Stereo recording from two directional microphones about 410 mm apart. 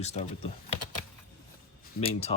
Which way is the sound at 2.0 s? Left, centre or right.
Centre.